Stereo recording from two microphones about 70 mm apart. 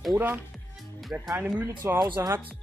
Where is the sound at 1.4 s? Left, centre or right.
Right.